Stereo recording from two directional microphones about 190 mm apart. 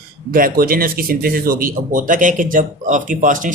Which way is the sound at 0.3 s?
50° right (ahead or behind).